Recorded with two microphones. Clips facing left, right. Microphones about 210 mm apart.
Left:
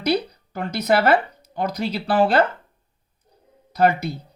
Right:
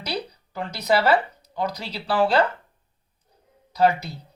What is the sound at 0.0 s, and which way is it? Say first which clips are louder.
Speech: left 9 dB; 55° left (ahead or behind).